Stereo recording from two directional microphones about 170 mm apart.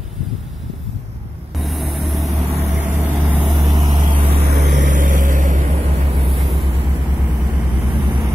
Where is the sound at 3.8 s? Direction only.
30° right (ahead or behind).